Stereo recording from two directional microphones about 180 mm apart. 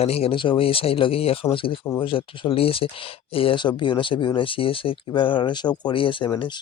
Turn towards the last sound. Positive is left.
turn(degrees=25)  # may be behind; listen again after turning